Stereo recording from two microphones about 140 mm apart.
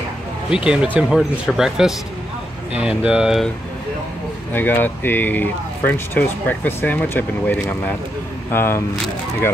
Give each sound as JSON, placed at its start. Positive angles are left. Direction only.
{"t": 0.5, "sound": "speech", "side_deg": -5}
{"t": 4.5, "sound": "speech", "side_deg": 15}